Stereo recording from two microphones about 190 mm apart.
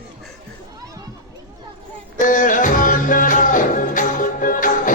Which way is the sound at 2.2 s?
45° left (ahead or behind).